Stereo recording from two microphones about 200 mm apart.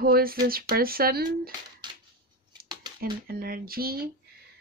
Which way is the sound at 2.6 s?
20° right (ahead or behind).